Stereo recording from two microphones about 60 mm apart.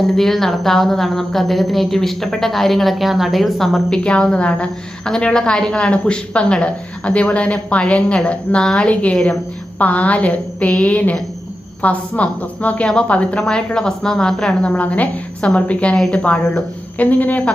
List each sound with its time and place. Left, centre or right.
0.2 s a woman's voice: centre
3.8 s a woman's voice: centre
9.1 s a woman's voice: centre
9.7 s a woman's voice: left; by 14.7 s centre
14.7 s a woman's voice: left